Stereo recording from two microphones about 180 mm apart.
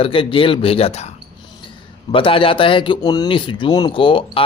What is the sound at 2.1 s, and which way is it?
Speech, 30° left (ahead or behind).